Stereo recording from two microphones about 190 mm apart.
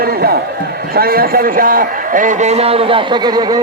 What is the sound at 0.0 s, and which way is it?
A man's voice, 55° right (ahead or behind).